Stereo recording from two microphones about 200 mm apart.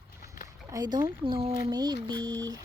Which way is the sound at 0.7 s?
20° right (ahead or behind).